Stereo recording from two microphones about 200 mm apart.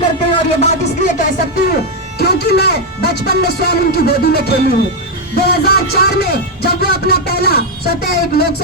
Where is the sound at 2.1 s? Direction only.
55° left (ahead or behind).